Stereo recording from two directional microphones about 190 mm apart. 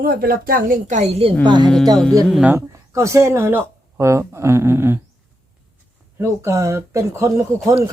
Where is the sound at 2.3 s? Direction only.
5° right (ahead or behind).